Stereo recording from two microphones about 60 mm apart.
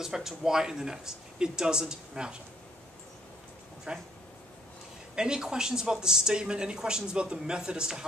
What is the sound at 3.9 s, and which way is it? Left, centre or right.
Speech, centre.